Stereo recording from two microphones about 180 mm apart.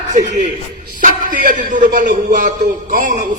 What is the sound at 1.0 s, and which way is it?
A man's voice, 45° right (ahead or behind).